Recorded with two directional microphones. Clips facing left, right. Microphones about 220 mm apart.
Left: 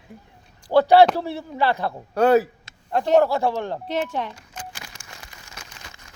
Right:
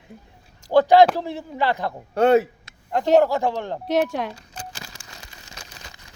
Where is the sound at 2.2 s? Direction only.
25° right (ahead or behind).